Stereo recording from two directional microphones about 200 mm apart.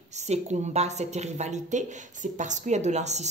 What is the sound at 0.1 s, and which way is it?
A woman's voice, 35° right (ahead or behind).